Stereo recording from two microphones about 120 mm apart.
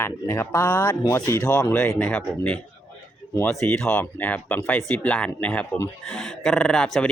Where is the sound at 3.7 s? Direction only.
15° left (ahead or behind).